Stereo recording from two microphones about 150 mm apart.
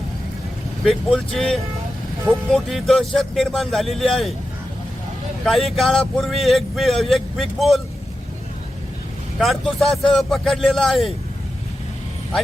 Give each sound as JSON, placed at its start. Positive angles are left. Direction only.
{"t": 0.9, "sound": "speech", "side_deg": 5}
{"t": 5.5, "sound": "speech", "side_deg": 0}
{"t": 9.4, "sound": "speech", "side_deg": 0}